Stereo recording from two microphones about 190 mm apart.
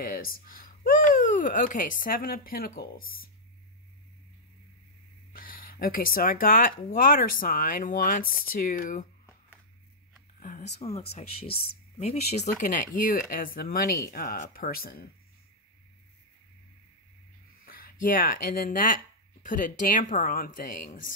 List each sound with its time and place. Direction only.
0.0 s speech: 50° left (ahead or behind)
5.3 s speech: 50° left (ahead or behind)
10.4 s speech: 40° left (ahead or behind)
17.6 s speech: 50° left (ahead or behind)